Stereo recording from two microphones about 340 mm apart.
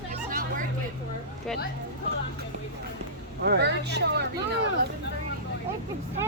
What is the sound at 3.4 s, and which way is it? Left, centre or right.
Speech, right.